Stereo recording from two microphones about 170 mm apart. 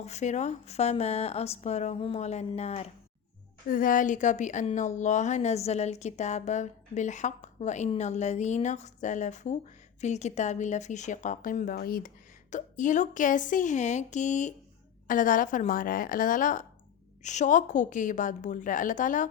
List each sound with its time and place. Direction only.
0.0 s speech: 40° left (ahead or behind)
3.7 s speech: 55° left (ahead or behind)
12.5 s speech: 45° left (ahead or behind)